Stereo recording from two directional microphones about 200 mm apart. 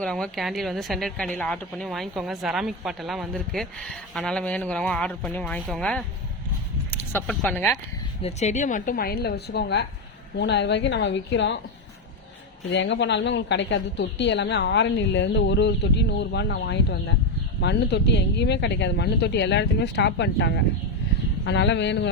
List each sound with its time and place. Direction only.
0.0 s a woman's voice: 5° left (ahead or behind)
8.2 s a woman's voice: 35° left (ahead or behind); by 11.6 s 65° left (ahead or behind)
12.7 s a woman's voice: 65° left (ahead or behind)